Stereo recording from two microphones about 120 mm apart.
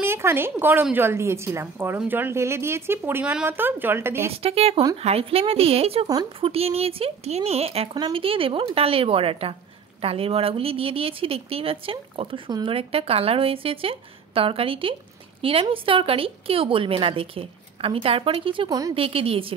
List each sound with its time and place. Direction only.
0.0 s speech: 20° right (ahead or behind)
4.3 s a woman's voice: 55° right (ahead or behind)
18.7 s speech: 30° right (ahead or behind)
18.9 s a woman's voice: 50° right (ahead or behind)